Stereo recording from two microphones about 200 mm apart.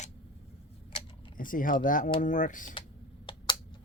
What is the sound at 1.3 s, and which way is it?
Speech, 45° left (ahead or behind).